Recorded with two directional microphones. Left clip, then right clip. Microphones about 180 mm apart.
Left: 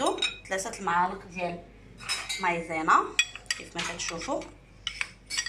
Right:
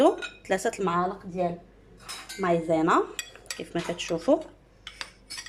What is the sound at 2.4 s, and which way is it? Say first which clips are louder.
Dishes: right 7 dB; 60° right (ahead or behind).